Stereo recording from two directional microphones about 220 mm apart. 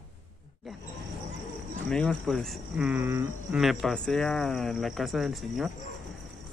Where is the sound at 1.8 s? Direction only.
5° left (ahead or behind).